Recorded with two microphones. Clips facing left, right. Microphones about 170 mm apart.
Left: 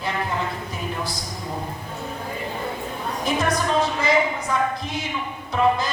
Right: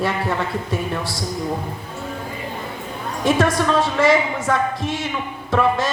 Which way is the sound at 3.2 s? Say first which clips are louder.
Right 6 dB; 85° right.